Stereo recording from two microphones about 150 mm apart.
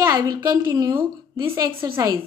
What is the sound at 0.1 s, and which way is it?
A woman's voice, 25° right (ahead or behind).